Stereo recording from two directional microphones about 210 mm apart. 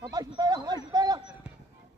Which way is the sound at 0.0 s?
20° right (ahead or behind).